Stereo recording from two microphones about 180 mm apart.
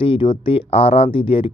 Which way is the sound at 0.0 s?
30° left (ahead or behind).